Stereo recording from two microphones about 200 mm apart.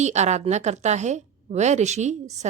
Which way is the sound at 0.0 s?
35° right (ahead or behind).